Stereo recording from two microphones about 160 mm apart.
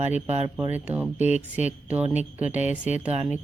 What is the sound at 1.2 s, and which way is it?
Speech, 45° left (ahead or behind).